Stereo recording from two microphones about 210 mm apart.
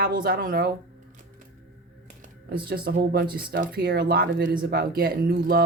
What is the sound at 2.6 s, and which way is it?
Speech, 45° right (ahead or behind).